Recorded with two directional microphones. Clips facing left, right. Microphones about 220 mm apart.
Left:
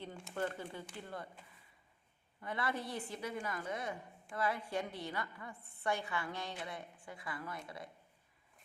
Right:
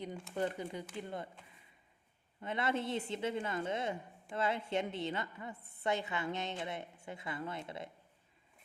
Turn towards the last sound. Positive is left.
turn(degrees=-25)  # may be behind; listen again after turning